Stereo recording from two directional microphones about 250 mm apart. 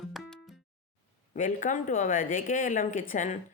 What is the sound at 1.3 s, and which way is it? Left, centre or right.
A woman's voice, left.